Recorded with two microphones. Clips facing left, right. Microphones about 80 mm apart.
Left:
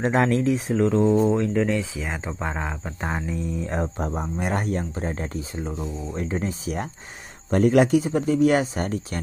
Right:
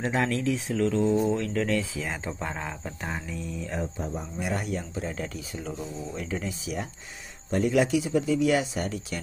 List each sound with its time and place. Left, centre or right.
0.0 s speech: left
0.4 s speech: left
3.1 s speech: left